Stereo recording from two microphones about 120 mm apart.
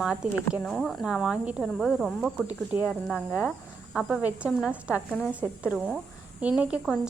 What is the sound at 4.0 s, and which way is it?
A woman's voice, centre (ahead or behind).